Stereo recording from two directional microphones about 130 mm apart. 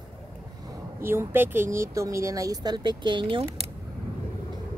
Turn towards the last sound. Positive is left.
turn(degrees=-45)  # may be behind; listen again after turning